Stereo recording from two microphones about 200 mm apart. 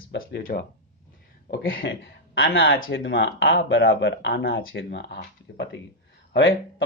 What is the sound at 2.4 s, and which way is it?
Speech, 70° left (ahead or behind).